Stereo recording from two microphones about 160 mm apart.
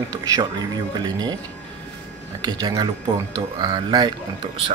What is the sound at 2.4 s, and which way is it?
Speech, 25° right (ahead or behind).